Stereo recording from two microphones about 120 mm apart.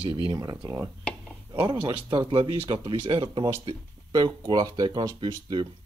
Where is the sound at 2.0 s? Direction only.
45° right (ahead or behind).